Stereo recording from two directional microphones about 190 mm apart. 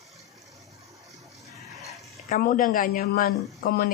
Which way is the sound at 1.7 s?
Centre (ahead or behind).